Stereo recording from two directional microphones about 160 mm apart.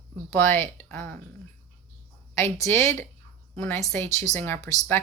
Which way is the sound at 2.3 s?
15° left (ahead or behind).